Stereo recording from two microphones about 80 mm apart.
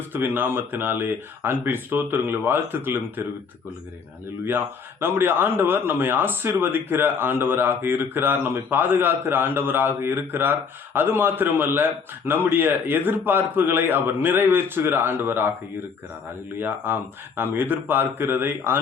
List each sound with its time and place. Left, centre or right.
0.1 s speech: right
4.4 s speech: right
16.6 s speech: right